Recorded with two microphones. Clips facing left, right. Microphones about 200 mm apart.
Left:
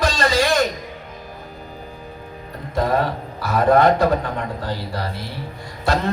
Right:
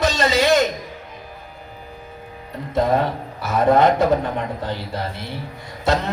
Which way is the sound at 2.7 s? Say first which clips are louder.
Right 1 dB; 20° right (ahead or behind).